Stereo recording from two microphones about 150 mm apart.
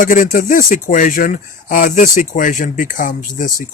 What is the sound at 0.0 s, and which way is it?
Speech, 65° left (ahead or behind).